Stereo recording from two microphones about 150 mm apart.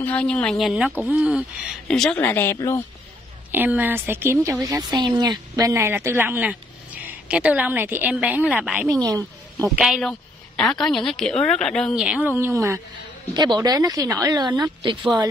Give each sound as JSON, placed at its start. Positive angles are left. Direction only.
{"t": 0.0, "sound": "a woman's voice", "side_deg": 10}
{"t": 1.9, "sound": "speech", "side_deg": 5}
{"t": 3.5, "sound": "a woman's voice", "side_deg": -10}
{"t": 8.8, "sound": "a woman's voice", "side_deg": -25}
{"t": 9.7, "sound": "a woman's voice", "side_deg": 0}
{"t": 13.3, "sound": "speech", "side_deg": -30}